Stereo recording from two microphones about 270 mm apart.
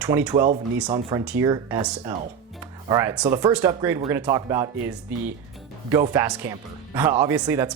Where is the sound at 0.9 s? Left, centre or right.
Centre.